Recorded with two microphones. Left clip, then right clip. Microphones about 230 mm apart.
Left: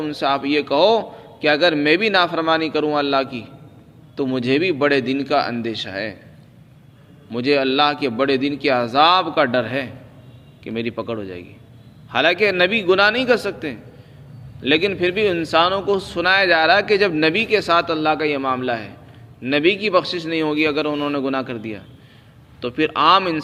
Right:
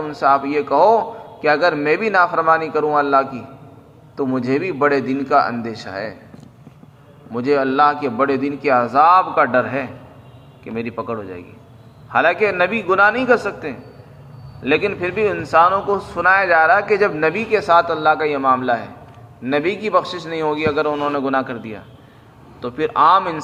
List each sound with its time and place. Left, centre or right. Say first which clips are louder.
0.0 s a man's voice: right 4 dB; left
7.3 s a man's voice: right 1 dB; left